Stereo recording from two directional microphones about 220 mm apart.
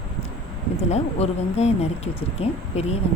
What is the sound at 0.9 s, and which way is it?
Speech, 30° left (ahead or behind).